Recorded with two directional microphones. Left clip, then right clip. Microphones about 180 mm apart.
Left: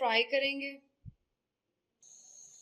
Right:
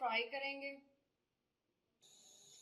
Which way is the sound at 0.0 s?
50° left (ahead or behind).